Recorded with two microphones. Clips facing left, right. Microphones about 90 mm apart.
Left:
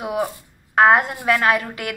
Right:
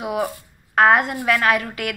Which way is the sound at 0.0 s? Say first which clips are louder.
Even; 35° left (ahead or behind).